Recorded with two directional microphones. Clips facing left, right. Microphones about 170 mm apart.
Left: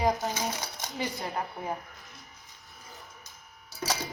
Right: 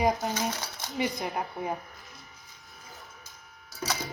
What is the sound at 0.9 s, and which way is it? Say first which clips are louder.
Speech: right 3 dB; 15° right (ahead or behind).